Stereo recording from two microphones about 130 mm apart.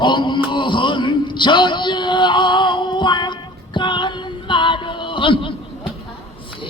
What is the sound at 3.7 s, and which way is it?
Music, 35° left (ahead or behind).